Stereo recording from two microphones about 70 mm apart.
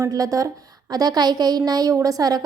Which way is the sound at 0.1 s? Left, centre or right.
Right.